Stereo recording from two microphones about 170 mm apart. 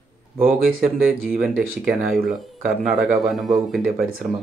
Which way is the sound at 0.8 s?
5° right (ahead or behind).